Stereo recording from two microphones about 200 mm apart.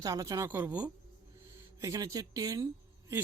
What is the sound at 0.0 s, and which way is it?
Speech, 20° right (ahead or behind).